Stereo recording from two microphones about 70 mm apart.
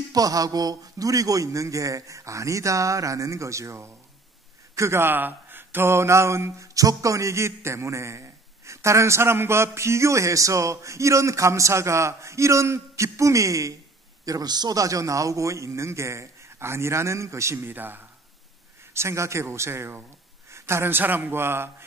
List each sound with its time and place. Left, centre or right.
0.1 s a man's voice: right
6.7 s a man's voice: right
14.2 s a man's voice: right
18.9 s speech: right